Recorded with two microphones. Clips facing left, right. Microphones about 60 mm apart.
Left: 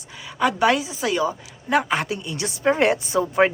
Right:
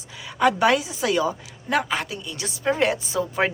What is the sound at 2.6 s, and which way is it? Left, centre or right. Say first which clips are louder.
Speech: left 3 dB; left.